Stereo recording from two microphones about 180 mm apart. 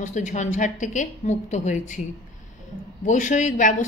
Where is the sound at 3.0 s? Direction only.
45° left (ahead or behind).